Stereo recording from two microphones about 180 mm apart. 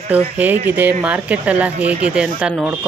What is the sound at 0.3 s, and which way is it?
Speech, 10° right (ahead or behind).